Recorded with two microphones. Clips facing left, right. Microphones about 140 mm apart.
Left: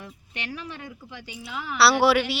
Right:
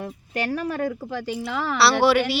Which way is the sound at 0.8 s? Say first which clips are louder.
Right 14 dB; 65° right (ahead or behind).